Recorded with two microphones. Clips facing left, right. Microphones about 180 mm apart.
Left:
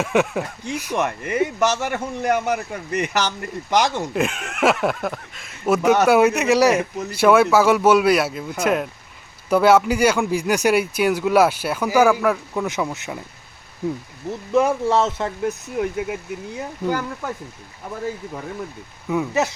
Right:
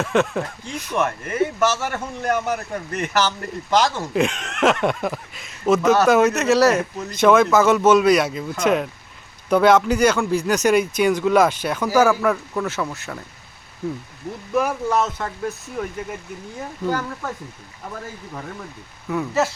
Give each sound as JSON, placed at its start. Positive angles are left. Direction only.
{"t": 0.0, "sound": "speech", "side_deg": 10}
{"t": 4.1, "sound": "speech", "side_deg": 5}
{"t": 5.6, "sound": "speech", "side_deg": 10}
{"t": 14.5, "sound": "speech", "side_deg": 25}
{"t": 19.0, "sound": "speech", "side_deg": 15}